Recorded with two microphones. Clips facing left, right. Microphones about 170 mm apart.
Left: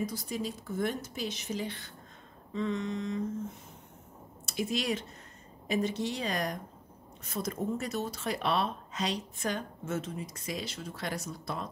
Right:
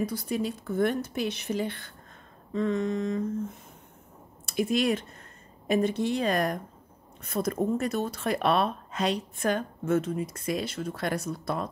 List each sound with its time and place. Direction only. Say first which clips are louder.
0.0 s a woman's voice: right 5 dB; 60° right (ahead or behind)
2.5 s a sound: right 6 dB; 50° right (ahead or behind)
4.5 s a woman's voice: right 6 dB; 55° right (ahead or behind)